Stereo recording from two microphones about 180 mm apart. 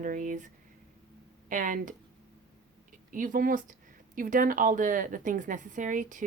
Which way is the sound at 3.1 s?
50° right (ahead or behind).